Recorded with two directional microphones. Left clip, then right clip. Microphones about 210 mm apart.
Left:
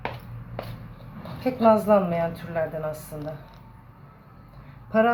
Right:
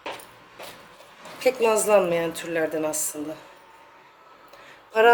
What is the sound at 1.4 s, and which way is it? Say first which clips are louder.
A woman's voice: left 1 dB; 55° right (ahead or behind).